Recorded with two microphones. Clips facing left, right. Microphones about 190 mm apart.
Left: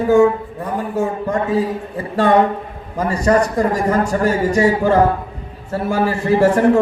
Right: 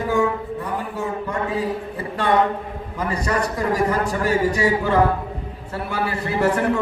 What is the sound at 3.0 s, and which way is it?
A man's voice, 45° left (ahead or behind).